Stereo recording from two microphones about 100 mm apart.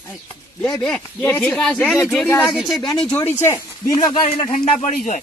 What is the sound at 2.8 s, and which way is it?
Speech, 45° left (ahead or behind).